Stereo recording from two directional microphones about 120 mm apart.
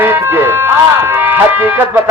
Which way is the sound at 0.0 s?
15° right (ahead or behind).